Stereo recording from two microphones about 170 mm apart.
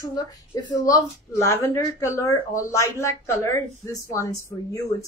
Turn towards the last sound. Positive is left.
turn(degrees=20)  # may be behind; listen again after turning